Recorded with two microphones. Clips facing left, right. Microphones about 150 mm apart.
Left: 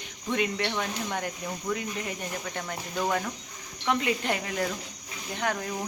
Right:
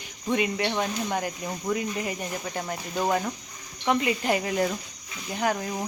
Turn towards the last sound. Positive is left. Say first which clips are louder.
# right 3 dB
turn(degrees=-15)  # may be behind; listen again after turning